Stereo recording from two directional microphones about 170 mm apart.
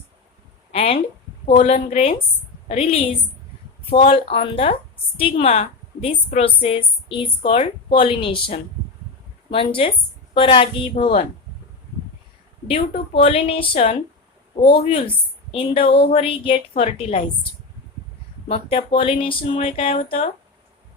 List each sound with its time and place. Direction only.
0.7 s a sound: 35° left (ahead or behind)
1.5 s a woman's voice: 40° left (ahead or behind)
11.0 s speech: 45° left (ahead or behind)
12.6 s a woman's voice: 35° left (ahead or behind)
18.9 s a woman's voice: 30° left (ahead or behind)